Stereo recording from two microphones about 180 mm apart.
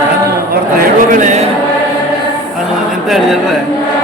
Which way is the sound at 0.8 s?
45° right (ahead or behind).